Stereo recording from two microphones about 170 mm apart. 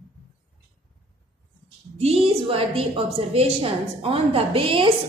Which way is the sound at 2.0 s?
35° right (ahead or behind).